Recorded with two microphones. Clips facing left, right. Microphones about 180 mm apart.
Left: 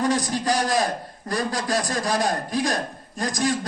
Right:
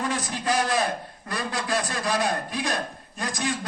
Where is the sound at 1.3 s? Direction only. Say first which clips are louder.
Left 3 dB; 40° left (ahead or behind).